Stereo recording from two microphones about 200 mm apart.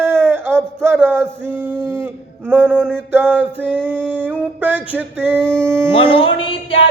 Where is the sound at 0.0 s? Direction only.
10° right (ahead or behind).